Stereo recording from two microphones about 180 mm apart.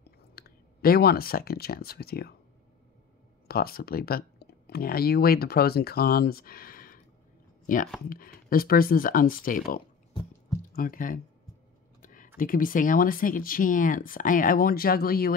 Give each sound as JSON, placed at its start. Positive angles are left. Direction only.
{"t": 0.4, "sound": "speech", "side_deg": 60}
{"t": 3.4, "sound": "speech", "side_deg": 55}
{"t": 12.0, "sound": "a sound", "side_deg": 50}
{"t": 12.4, "sound": "speech", "side_deg": 50}